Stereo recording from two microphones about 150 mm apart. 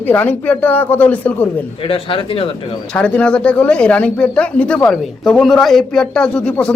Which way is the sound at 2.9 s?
5° left (ahead or behind).